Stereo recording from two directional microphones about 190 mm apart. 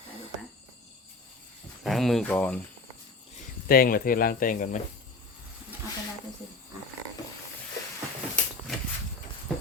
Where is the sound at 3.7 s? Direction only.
50° left (ahead or behind).